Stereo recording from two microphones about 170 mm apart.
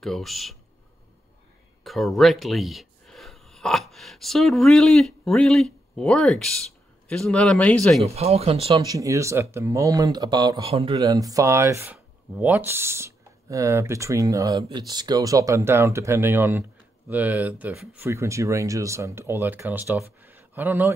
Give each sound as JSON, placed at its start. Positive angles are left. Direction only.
{"t": 0.0, "sound": "speech", "side_deg": 0}
{"t": 1.9, "sound": "speech", "side_deg": 0}
{"t": 8.0, "sound": "speech", "side_deg": -40}
{"t": 8.8, "sound": "speech", "side_deg": -20}
{"t": 10.6, "sound": "speech", "side_deg": -35}
{"t": 11.0, "sound": "ratchet", "side_deg": -20}